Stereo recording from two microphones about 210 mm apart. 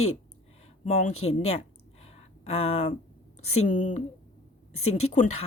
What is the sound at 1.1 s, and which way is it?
Speech, 85° left.